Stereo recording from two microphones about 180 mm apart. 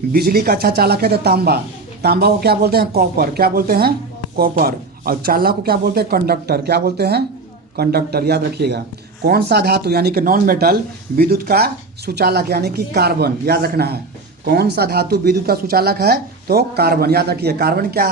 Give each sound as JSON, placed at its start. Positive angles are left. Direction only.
{"t": 0.1, "sound": "speech", "side_deg": -60}